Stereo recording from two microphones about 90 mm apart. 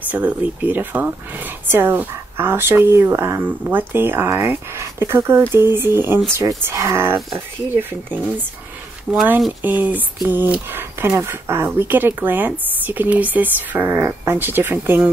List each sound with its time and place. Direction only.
0.1 s speech: 15° right (ahead or behind)
9.1 s speech: centre (ahead or behind)
9.6 s speech: 20° right (ahead or behind)